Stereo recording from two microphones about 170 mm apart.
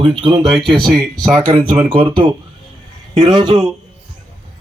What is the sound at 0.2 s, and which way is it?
Speech, 30° right (ahead or behind).